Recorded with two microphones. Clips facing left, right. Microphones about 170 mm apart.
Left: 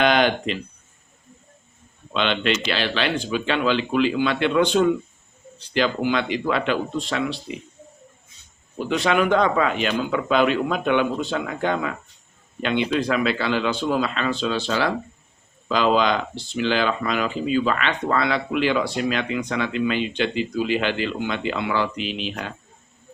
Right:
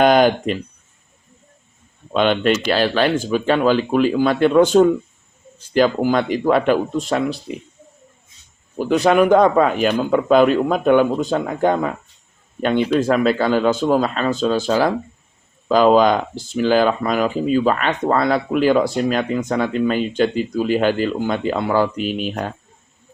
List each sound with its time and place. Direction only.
0.0 s speech: 45° right (ahead or behind)
2.1 s speech: 45° right (ahead or behind)
7.5 s speech: 5° left (ahead or behind)
9.0 s speech: 40° right (ahead or behind)